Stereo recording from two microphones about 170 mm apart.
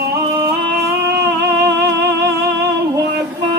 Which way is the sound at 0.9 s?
70° right (ahead or behind).